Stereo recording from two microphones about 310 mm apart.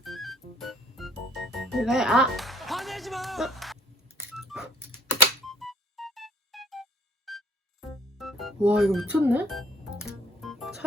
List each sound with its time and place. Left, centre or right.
0.0 s music: centre
4.2 s a sound: centre
5.5 s music: centre